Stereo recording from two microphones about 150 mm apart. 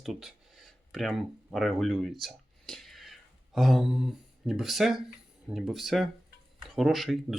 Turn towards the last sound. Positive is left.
turn(degrees=0)  # may be behind; listen again after turning